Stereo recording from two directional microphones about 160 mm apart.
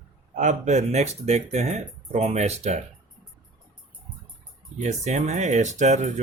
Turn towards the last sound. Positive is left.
turn(degrees=-45)  # may be behind; listen again after turning